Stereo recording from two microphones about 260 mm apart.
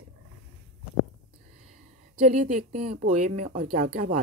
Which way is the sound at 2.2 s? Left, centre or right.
Right.